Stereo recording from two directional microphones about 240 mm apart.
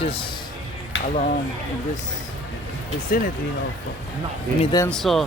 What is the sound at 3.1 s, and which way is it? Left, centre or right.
Speech, left.